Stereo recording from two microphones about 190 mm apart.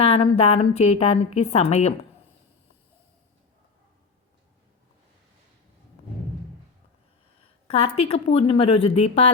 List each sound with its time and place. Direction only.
0.0 s a woman's voice: 30° left (ahead or behind)
7.9 s a woman's voice: 30° left (ahead or behind)